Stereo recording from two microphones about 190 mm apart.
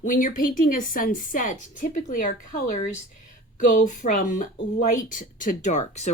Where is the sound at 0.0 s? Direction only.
45° left (ahead or behind).